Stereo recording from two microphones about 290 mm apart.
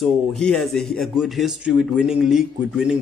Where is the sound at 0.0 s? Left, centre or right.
Centre.